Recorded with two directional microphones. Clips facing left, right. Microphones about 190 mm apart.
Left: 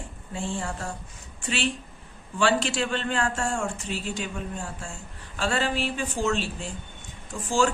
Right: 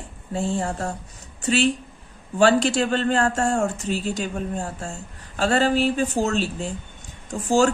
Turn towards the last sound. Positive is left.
turn(degrees=-40)  # may be behind; listen again after turning